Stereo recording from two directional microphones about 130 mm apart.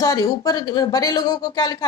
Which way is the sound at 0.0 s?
25° left (ahead or behind).